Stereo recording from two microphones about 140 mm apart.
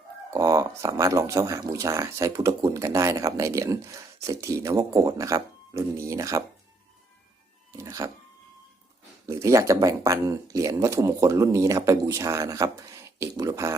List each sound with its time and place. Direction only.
0.3 s speech: 25° right (ahead or behind)
7.9 s a sound: 20° right (ahead or behind)
9.2 s speech: 20° right (ahead or behind)